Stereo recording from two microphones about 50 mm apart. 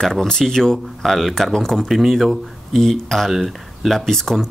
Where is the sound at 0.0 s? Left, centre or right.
Centre.